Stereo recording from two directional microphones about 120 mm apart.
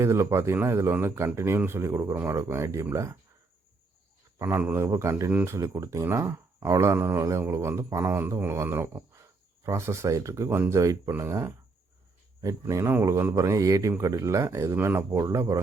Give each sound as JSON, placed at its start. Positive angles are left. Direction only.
{"t": 0.0, "sound": "a man's voice", "side_deg": -20}
{"t": 4.4, "sound": "a man's voice", "side_deg": -20}